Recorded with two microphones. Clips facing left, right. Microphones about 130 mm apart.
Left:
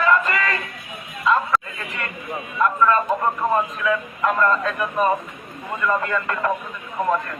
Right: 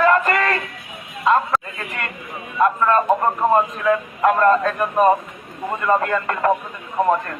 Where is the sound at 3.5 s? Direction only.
45° right (ahead or behind).